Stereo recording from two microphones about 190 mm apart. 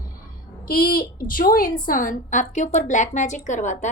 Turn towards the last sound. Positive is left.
turn(degrees=40)  # may be behind; listen again after turning